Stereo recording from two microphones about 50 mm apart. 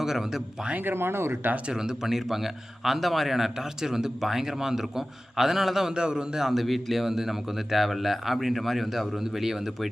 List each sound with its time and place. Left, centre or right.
0.0 s speech: centre
0.9 s speech: right
1.6 s a man's voice: centre